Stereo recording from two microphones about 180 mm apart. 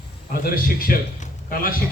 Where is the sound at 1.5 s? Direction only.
55° left (ahead or behind).